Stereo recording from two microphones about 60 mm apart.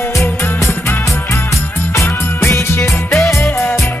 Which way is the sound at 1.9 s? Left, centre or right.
Left.